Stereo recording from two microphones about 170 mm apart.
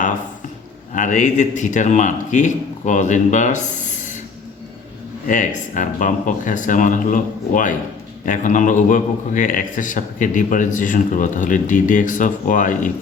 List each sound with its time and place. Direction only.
0.9 s a man's voice: 45° left (ahead or behind)
5.2 s a man's voice: 50° left (ahead or behind)